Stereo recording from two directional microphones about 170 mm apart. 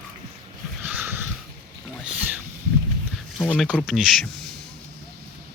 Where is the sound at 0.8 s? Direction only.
10° right (ahead or behind).